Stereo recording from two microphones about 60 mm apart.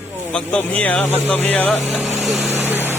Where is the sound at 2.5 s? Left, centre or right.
Right.